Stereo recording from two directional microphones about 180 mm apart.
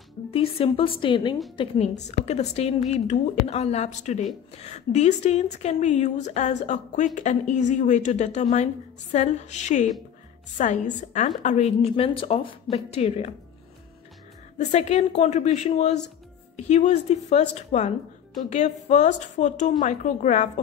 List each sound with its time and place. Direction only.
0.3 s a woman's voice: 30° left (ahead or behind)
1.6 s a woman's voice: 40° left (ahead or behind)
14.6 s a woman's voice: 40° left (ahead or behind)